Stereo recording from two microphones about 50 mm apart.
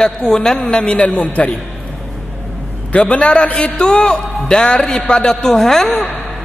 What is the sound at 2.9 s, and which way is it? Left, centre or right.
A man's voice, left.